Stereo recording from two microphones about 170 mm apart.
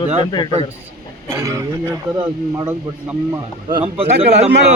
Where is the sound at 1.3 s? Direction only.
20° right (ahead or behind).